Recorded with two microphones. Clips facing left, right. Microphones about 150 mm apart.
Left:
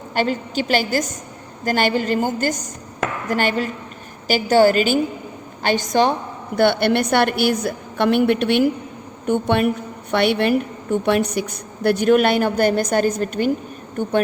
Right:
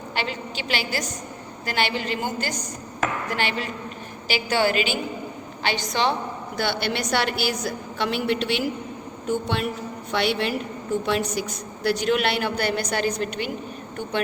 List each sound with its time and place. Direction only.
0.1 s a woman's voice: 45° left (ahead or behind)